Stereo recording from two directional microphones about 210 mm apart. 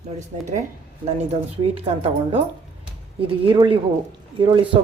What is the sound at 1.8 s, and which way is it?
Speech, 25° right (ahead or behind).